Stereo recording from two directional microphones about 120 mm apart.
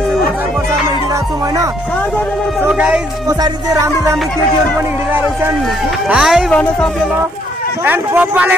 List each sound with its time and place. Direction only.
2.7 s speech: 5° right (ahead or behind)
3.3 s music: 30° right (ahead or behind)
6.0 s speech: 5° right (ahead or behind)
6.5 s speech: 10° left (ahead or behind)
7.8 s speech: 15° right (ahead or behind)